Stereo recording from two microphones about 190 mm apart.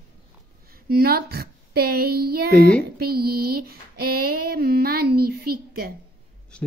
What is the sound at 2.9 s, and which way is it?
Female singing, 55° right (ahead or behind).